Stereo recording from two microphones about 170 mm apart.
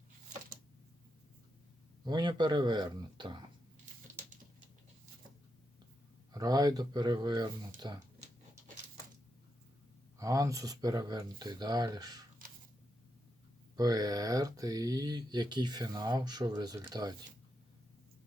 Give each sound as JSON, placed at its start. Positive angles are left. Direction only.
{"t": 2.0, "sound": "speech", "side_deg": -25}
{"t": 6.3, "sound": "speech", "side_deg": -20}
{"t": 10.2, "sound": "speech", "side_deg": -20}
{"t": 13.7, "sound": "speech", "side_deg": -20}